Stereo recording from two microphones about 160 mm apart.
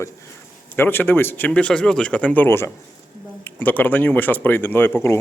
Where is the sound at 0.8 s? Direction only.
10° left (ahead or behind).